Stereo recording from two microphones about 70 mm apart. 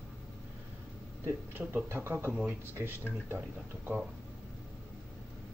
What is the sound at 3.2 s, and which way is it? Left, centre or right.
Speech, right.